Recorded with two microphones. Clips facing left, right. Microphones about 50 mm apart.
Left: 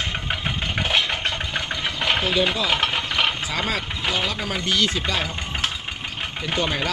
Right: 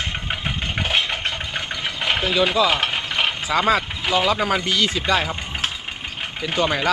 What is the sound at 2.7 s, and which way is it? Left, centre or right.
Stir, centre.